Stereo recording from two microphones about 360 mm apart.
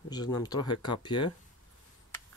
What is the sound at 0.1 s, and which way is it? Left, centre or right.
Speech, centre.